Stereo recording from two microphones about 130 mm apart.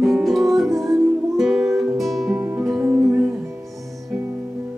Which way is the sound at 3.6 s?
Centre (ahead or behind).